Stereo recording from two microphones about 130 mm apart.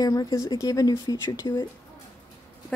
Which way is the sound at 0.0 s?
25° left (ahead or behind).